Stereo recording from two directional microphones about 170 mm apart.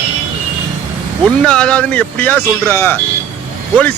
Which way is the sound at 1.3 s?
5° left (ahead or behind).